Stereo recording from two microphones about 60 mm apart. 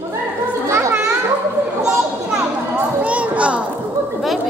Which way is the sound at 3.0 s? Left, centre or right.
Right.